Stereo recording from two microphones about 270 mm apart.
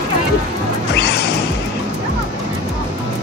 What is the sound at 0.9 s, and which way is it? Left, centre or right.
Music, left.